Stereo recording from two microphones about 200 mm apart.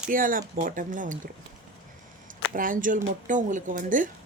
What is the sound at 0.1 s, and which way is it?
Speech, 45° right (ahead or behind).